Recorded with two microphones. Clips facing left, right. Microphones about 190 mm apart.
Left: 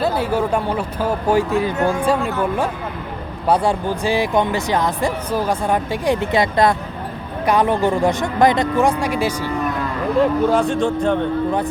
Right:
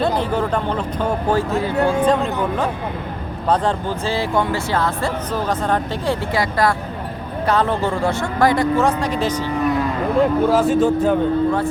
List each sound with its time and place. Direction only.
0.0 s speech: 10° left (ahead or behind)
3.5 s speech: 10° left (ahead or behind)
10.2 s speech: 5° right (ahead or behind)